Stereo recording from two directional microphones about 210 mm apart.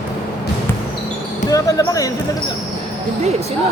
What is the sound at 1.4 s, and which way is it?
Basketball bounce, 15° left (ahead or behind).